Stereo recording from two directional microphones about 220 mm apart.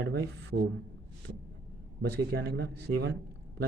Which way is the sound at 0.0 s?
50° right (ahead or behind).